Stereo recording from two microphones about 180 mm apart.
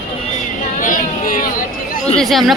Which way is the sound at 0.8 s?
50° left (ahead or behind).